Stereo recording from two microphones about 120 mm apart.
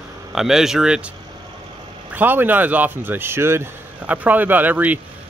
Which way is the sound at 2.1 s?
15° right (ahead or behind).